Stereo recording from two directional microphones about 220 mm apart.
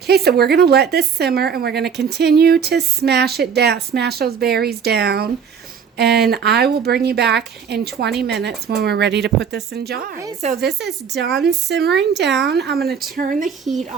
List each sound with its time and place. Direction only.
0.1 s speech: 45° right (ahead or behind)